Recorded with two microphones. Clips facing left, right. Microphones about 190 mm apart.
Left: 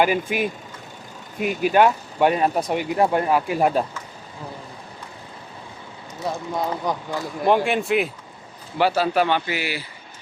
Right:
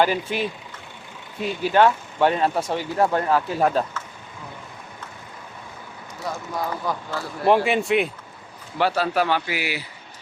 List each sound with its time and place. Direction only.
0.0 s speech: 10° left (ahead or behind)
6.1 s speech: 20° left (ahead or behind)
7.4 s a man's voice: centre (ahead or behind)